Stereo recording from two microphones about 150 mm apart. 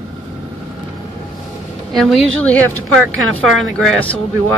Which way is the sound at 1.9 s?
Centre (ahead or behind).